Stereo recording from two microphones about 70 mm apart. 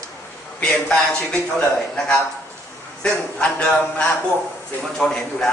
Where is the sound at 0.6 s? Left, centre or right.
Centre.